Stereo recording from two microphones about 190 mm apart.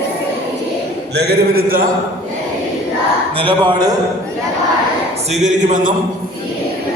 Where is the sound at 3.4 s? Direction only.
25° right (ahead or behind).